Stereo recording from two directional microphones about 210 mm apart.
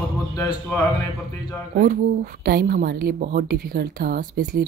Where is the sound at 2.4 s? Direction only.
45° right (ahead or behind).